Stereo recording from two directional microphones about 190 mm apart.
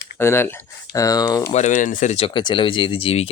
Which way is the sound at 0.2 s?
10° left (ahead or behind).